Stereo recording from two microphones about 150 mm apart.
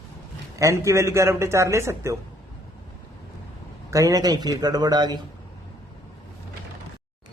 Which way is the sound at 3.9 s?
20° right (ahead or behind).